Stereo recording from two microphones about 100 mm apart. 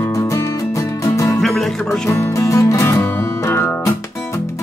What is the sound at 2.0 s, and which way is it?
Music, 30° left (ahead or behind).